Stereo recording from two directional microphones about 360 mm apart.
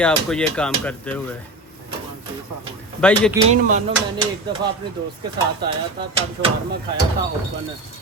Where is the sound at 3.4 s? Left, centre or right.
Right.